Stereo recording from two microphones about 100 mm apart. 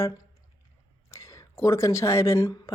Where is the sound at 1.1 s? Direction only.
30° left (ahead or behind).